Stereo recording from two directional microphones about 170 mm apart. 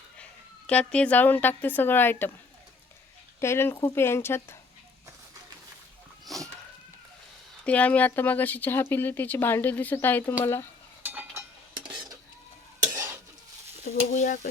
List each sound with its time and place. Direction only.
0.7 s speech: 5° left (ahead or behind)
3.4 s speech: 15° left (ahead or behind)
6.2 s dog: centre (ahead or behind)
7.6 s speech: 10° left (ahead or behind)
11.0 s a sound: 10° right (ahead or behind)
12.8 s stir: 20° right (ahead or behind)
13.8 s speech: 45° left (ahead or behind)